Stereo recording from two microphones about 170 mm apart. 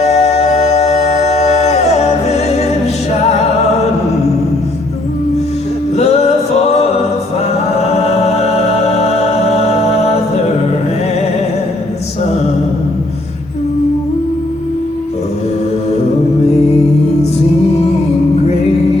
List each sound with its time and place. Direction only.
0.0 s music: 40° left (ahead or behind)
6.0 s singing: 40° left (ahead or behind)
7.8 s music: 40° left (ahead or behind)